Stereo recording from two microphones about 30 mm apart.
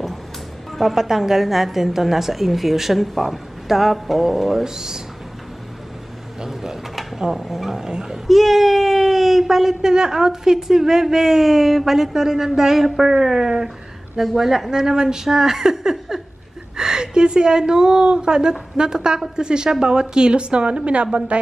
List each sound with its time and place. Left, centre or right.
0.9 s speech: centre
4.6 s a woman's voice: centre
6.4 s speech: centre
7.8 s a woman's voice: centre
8.3 s speech: centre
14.7 s a woman's voice: right
15.2 s a woman's voice: centre; by 21.4 s right